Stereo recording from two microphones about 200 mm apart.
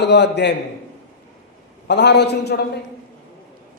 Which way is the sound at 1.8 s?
55° left (ahead or behind).